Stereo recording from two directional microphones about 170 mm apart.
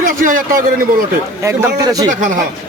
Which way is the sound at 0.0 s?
55° right (ahead or behind).